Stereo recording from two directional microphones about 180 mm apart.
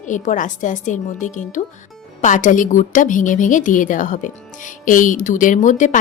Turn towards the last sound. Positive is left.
turn(degrees=45)  # may be behind; listen again after turning